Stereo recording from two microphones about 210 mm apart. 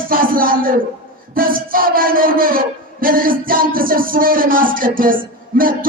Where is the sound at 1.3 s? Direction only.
40° right (ahead or behind).